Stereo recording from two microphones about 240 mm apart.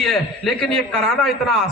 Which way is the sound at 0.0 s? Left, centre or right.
Centre.